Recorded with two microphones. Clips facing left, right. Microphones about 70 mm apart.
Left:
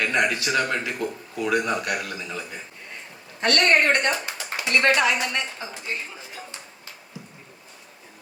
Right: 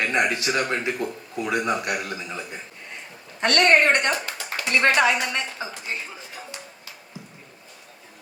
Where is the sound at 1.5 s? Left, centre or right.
Right.